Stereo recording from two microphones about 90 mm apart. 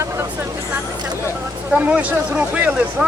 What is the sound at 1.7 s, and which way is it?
Speech, 15° right (ahead or behind).